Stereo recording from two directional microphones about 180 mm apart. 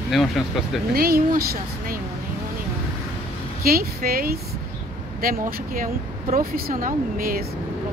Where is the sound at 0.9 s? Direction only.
55° right (ahead or behind).